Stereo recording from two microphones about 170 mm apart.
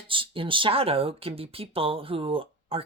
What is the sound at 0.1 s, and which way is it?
Speech, 30° right (ahead or behind).